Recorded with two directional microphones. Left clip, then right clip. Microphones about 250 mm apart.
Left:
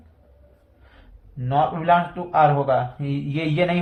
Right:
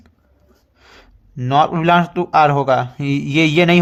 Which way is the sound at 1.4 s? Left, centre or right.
Right.